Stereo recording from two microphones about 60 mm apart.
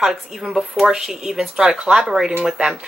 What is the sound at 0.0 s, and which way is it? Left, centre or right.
Speech, centre.